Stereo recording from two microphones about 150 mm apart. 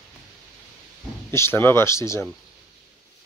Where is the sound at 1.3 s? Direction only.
15° left (ahead or behind).